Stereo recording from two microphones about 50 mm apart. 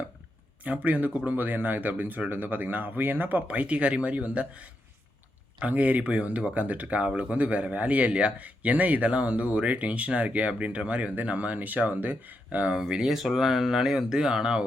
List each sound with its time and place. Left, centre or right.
0.6 s speech: right
3.4 s speech: right
12.7 s speech: centre